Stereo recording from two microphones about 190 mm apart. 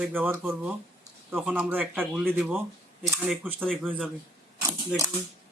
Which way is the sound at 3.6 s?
5° left (ahead or behind).